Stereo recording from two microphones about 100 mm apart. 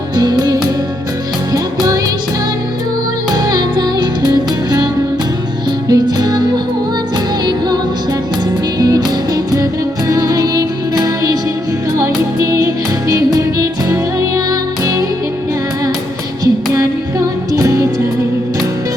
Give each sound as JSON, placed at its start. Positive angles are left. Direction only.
{"t": 0.2, "sound": "music", "side_deg": -45}
{"t": 3.3, "sound": "music", "side_deg": -40}
{"t": 5.9, "sound": "music", "side_deg": -40}
{"t": 8.8, "sound": "music", "side_deg": -40}
{"t": 16.7, "sound": "music", "side_deg": -30}